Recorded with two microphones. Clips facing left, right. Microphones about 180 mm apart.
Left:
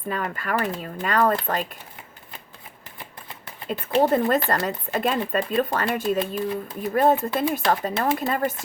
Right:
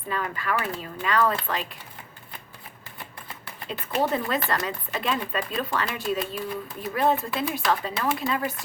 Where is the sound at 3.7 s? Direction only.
50° left (ahead or behind).